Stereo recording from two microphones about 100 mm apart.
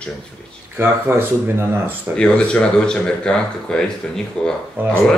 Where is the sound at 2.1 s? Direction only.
10° left (ahead or behind).